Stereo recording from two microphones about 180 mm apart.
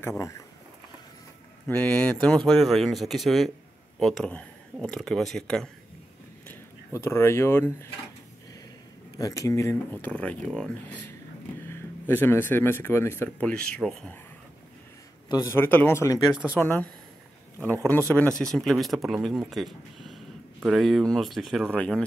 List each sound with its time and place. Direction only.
1.7 s speech: 5° left (ahead or behind)
9.1 s speech: 20° left (ahead or behind)
15.2 s speech: 20° left (ahead or behind)